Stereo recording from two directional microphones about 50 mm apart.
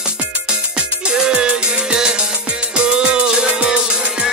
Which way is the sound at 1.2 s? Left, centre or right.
Centre.